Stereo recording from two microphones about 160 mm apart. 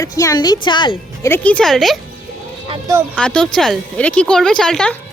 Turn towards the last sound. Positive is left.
turn(degrees=5)  # may be behind; listen again after turning